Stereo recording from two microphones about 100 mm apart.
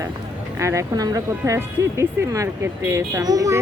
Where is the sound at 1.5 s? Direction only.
30° right (ahead or behind).